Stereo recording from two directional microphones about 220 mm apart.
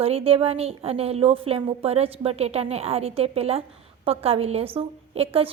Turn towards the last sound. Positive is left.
turn(degrees=-25)  # may be behind; listen again after turning